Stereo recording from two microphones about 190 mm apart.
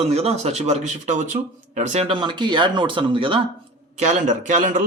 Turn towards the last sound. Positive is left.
turn(degrees=-40)  # may be behind; listen again after turning